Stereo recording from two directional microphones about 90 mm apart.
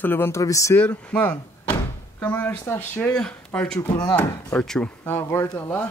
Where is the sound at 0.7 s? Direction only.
15° left (ahead or behind).